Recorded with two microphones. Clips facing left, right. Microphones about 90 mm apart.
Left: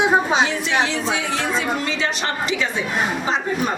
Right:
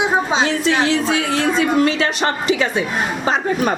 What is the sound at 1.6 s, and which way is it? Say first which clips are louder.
A woman's voice: right 7 dB; 60° right (ahead or behind).